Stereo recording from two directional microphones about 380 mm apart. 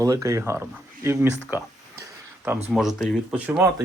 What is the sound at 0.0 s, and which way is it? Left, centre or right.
Speech, centre.